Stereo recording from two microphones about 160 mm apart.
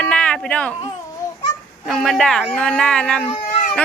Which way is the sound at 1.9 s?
Centre (ahead or behind).